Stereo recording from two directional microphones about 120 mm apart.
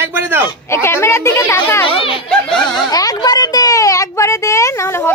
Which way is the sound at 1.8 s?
50° left (ahead or behind).